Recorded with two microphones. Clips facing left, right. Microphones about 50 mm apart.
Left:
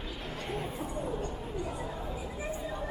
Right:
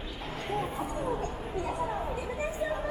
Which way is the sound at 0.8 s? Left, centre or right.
Right.